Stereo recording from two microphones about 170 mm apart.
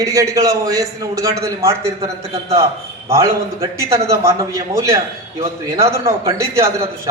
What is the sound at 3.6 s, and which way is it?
A man's voice, 15° right (ahead or behind).